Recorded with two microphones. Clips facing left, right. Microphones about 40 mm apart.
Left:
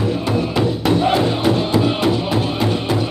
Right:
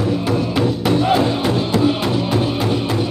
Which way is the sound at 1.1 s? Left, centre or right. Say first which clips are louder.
Left 1 dB; centre.